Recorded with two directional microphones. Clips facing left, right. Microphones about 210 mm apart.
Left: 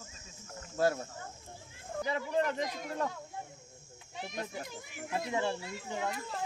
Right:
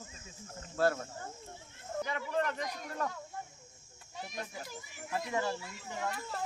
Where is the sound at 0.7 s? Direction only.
10° left (ahead or behind).